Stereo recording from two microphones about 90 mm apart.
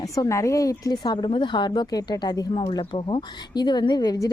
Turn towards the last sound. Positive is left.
turn(degrees=50)  # may be behind; listen again after turning